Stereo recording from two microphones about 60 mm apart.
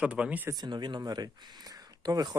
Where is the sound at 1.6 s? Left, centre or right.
Right.